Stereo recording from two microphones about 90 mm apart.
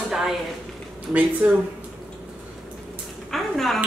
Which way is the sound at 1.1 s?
20° right (ahead or behind).